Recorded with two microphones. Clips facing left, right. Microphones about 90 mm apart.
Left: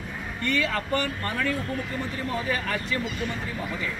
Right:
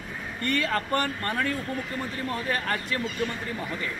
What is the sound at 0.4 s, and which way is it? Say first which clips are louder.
Speech: even; 45° right (ahead or behind).